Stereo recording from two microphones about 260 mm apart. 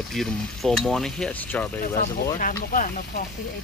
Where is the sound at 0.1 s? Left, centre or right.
Centre.